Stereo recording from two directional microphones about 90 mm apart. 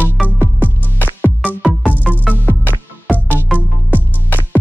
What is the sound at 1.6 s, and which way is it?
Music, centre (ahead or behind).